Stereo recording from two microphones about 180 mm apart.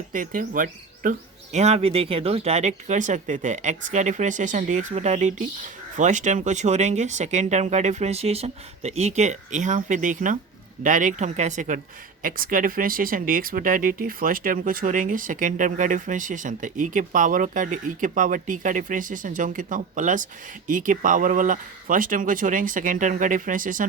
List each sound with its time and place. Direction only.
0.1 s speech: 50° right (ahead or behind)
1.5 s speech: 35° right (ahead or behind)